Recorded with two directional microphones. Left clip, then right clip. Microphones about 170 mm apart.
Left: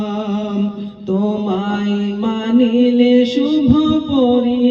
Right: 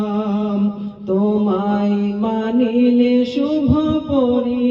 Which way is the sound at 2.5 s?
15° left (ahead or behind).